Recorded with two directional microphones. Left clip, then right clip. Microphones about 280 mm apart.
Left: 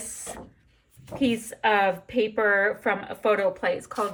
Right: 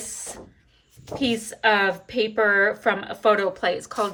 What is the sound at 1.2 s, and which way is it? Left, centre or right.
Speech, centre.